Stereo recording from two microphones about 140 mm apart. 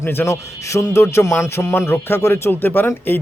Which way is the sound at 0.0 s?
15° left (ahead or behind).